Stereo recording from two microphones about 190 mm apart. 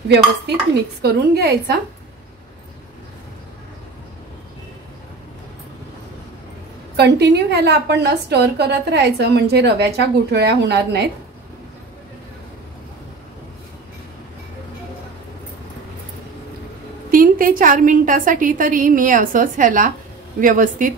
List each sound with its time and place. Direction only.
1.0 s a woman's voice: 55° right (ahead or behind)
7.0 s a woman's voice: 60° right (ahead or behind)
17.1 s a woman's voice: 45° right (ahead or behind)